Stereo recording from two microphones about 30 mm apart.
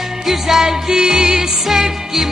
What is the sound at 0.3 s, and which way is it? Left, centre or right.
Music, centre.